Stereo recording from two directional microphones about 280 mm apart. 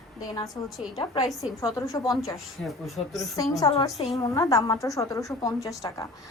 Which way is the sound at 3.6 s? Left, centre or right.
Centre.